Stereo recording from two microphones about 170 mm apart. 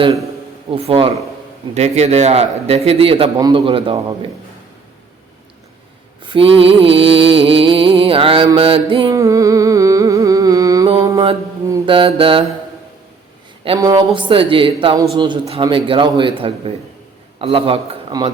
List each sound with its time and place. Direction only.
0.7 s a man's voice: 35° right (ahead or behind)
6.2 s music: 30° right (ahead or behind)
9.1 s music: 20° right (ahead or behind)
11.0 s mantra: 20° right (ahead or behind)
11.9 s a man's voice: 30° right (ahead or behind)
13.8 s a man's voice: 25° right (ahead or behind)